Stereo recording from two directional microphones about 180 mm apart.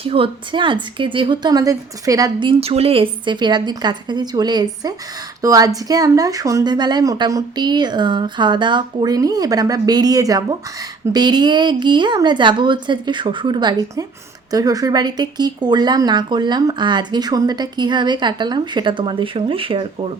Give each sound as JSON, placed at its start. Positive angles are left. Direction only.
{"t": 0.0, "sound": "speech", "side_deg": -30}